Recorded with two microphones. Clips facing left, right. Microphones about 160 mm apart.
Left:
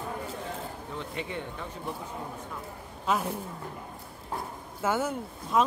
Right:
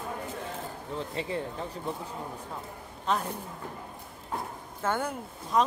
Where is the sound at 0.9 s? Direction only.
35° right (ahead or behind).